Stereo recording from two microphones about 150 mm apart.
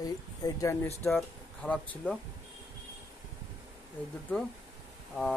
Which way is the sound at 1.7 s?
10° left (ahead or behind).